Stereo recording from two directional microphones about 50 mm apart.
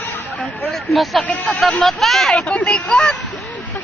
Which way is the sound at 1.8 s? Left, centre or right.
Centre.